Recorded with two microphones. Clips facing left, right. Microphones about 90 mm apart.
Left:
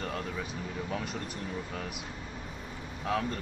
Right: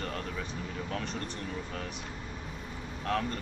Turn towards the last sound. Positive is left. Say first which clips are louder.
# even
turn(degrees=5)  # may be behind; listen again after turning